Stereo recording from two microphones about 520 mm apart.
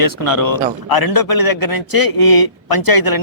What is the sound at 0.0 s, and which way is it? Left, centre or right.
A man's voice, left.